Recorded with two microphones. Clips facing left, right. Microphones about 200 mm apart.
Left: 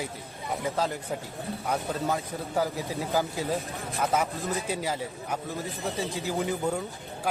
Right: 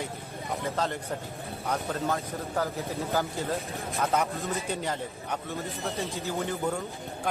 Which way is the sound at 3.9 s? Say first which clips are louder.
Even; 5° left (ahead or behind).